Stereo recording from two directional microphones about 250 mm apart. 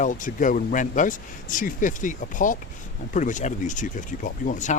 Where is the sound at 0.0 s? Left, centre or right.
Left.